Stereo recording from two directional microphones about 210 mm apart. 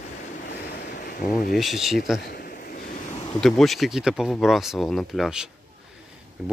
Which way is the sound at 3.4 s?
Centre (ahead or behind).